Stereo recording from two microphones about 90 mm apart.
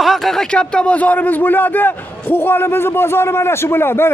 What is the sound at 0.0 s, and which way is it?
A man's voice, centre (ahead or behind).